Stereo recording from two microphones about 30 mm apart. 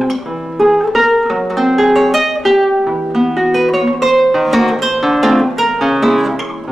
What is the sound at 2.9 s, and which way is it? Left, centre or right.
Music, centre.